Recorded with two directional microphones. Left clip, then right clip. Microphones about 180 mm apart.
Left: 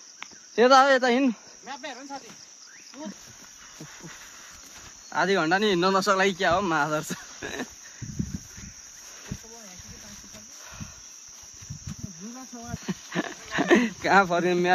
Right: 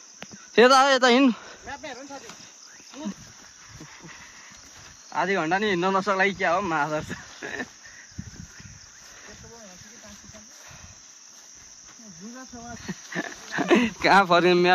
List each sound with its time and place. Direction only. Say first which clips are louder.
0.6 s speech: right 1 dB; 45° right (ahead or behind); by 1.4 s 65° right (ahead or behind)
1.7 s cricket: even; 65° left (ahead or behind)
5.1 s speech: left 1 dB; 20° left (ahead or behind)
12.8 s a sound: left 1 dB; 35° left (ahead or behind)
13.5 s a sound: even; 10° left (ahead or behind)
13.9 s speech: right 2 dB; 35° right (ahead or behind)
14.3 s speech: right 5 dB; 60° right (ahead or behind)